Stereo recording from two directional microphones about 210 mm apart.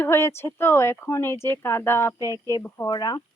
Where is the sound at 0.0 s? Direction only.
10° left (ahead or behind).